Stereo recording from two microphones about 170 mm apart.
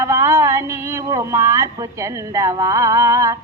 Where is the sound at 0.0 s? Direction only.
15° right (ahead or behind).